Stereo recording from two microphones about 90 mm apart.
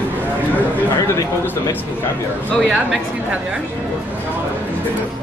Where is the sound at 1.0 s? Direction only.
30° left (ahead or behind).